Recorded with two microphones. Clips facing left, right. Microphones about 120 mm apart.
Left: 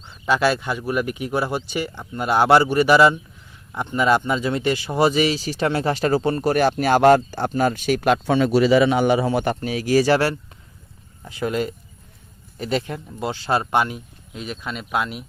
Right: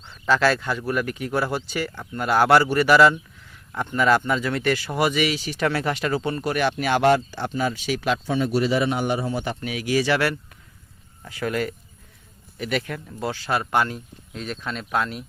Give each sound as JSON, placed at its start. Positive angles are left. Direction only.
{"t": 0.3, "sound": "speech", "side_deg": 15}
{"t": 9.6, "sound": "speech", "side_deg": 35}
{"t": 11.3, "sound": "speech", "side_deg": 20}